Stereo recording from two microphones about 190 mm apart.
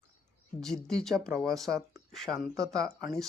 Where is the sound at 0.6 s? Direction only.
Centre (ahead or behind).